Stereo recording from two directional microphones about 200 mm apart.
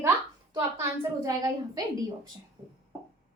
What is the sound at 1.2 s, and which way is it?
Speech, 20° right (ahead or behind).